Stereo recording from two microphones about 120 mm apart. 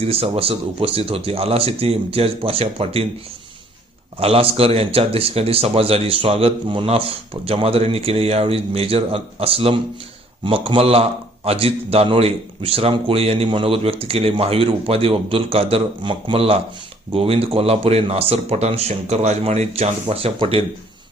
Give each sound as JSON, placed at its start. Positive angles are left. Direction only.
{"t": 0.0, "sound": "speech", "side_deg": -55}
{"t": 4.2, "sound": "a man's voice", "side_deg": -55}